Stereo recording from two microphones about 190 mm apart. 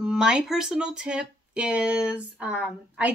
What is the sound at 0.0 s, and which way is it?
Speech, 5° right (ahead or behind).